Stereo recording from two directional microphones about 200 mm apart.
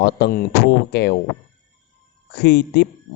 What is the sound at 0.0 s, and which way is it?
Speech, 50° left (ahead or behind).